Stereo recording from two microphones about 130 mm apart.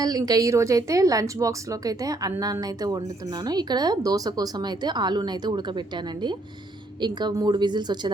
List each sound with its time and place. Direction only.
0.0 s a woman's voice: 30° right (ahead or behind)
7.0 s a woman's voice: 35° right (ahead or behind)